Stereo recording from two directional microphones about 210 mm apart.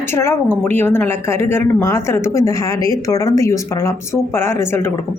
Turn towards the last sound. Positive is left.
turn(degrees=10)  # may be behind; listen again after turning